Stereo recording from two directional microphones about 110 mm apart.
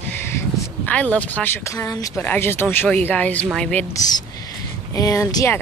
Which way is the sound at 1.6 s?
30° left (ahead or behind).